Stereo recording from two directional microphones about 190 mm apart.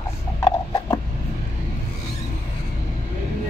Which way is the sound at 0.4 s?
20° left (ahead or behind).